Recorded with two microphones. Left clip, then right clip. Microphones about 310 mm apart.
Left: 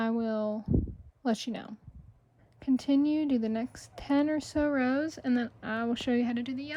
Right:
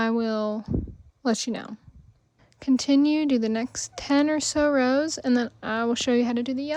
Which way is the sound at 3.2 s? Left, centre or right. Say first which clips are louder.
Right 6 dB; right.